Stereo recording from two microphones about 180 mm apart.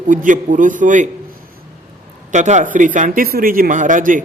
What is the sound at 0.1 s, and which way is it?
Speech, 45° right (ahead or behind).